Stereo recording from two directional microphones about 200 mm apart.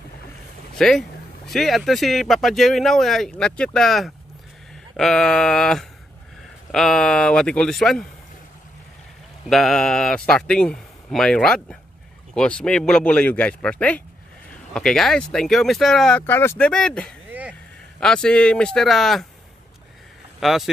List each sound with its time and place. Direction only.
0.7 s speech: centre (ahead or behind)
9.5 s speech: centre (ahead or behind)
17.3 s a sound: 5° right (ahead or behind)
18.0 s speech: 5° left (ahead or behind)
20.3 s speech: centre (ahead or behind)